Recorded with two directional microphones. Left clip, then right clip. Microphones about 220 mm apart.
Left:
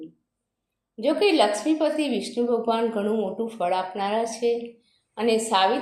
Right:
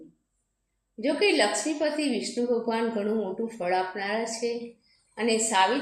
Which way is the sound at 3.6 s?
30° left (ahead or behind).